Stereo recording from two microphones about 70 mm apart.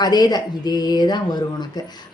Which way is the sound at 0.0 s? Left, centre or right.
Left.